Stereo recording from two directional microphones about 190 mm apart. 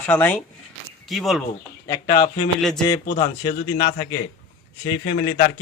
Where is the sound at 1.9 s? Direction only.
25° left (ahead or behind).